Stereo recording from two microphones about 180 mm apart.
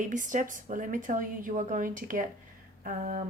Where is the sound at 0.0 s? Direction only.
45° right (ahead or behind).